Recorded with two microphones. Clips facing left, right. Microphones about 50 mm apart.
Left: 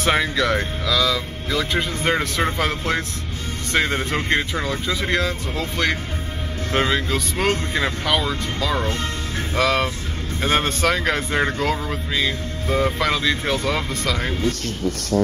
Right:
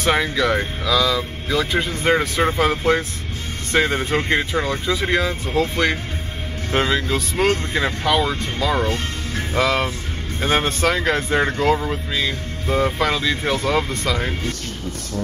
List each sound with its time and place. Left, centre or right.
0.0 s speech: centre
6.7 s speech: centre
15.2 s speech: left